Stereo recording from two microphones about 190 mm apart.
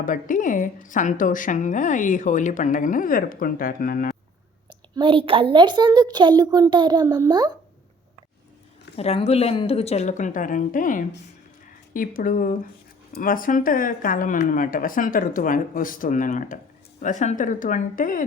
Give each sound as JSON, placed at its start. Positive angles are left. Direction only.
{"t": 0.0, "sound": "a woman's voice", "side_deg": 45}
{"t": 4.7, "sound": "a woman's voice", "side_deg": -25}
{"t": 9.0, "sound": "a woman's voice", "side_deg": 30}